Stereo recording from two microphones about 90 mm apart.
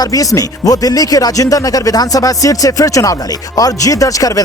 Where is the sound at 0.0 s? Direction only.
40° left (ahead or behind).